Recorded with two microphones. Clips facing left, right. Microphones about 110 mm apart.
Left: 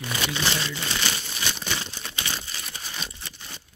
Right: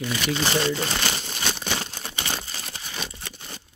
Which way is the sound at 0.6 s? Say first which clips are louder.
Right 6 dB; 40° right (ahead or behind).